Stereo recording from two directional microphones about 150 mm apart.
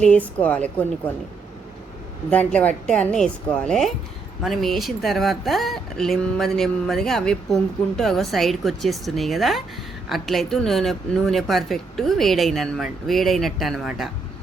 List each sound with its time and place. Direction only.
0.3 s a woman's voice: 10° left (ahead or behind)
2.3 s a woman's voice: 10° left (ahead or behind)